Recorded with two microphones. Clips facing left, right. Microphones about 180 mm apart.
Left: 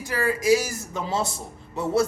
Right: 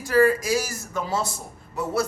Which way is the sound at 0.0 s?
20° left (ahead or behind).